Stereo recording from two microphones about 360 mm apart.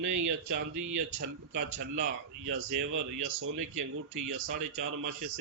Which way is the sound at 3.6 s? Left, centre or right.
Right.